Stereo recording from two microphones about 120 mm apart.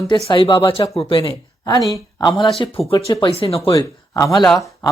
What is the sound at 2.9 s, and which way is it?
Speech, 30° left (ahead or behind).